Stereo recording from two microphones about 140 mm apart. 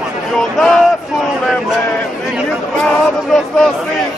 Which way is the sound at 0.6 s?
5° left (ahead or behind).